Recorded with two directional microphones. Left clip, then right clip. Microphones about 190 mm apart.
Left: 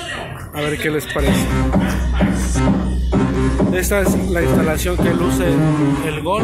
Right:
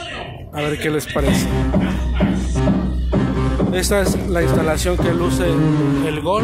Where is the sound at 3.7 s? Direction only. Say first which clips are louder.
Right 1 dB; 10° right (ahead or behind).